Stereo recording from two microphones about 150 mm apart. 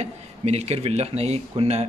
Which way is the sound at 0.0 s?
45° right (ahead or behind).